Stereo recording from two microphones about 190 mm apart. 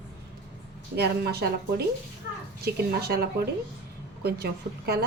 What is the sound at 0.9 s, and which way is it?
Speech, 60° right (ahead or behind).